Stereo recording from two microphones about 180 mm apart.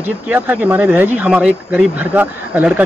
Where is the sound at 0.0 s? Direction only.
10° right (ahead or behind).